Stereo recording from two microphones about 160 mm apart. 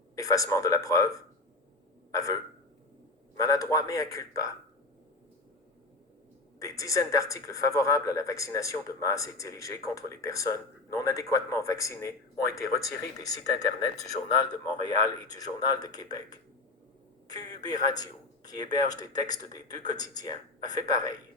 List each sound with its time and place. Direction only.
0.2 s speech: 20° left (ahead or behind)
3.3 s speech: 20° left (ahead or behind)
6.6 s speech: 20° left (ahead or behind)
17.2 s a man's voice: 25° left (ahead or behind)